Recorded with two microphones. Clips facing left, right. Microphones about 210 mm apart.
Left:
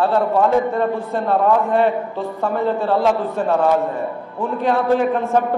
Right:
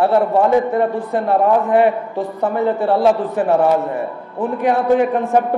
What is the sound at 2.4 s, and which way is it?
A man's voice, 15° right (ahead or behind).